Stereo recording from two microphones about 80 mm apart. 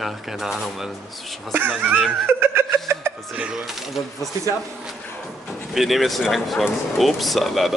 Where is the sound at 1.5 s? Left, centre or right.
Right.